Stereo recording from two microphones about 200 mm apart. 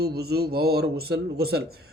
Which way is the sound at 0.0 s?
50° right (ahead or behind).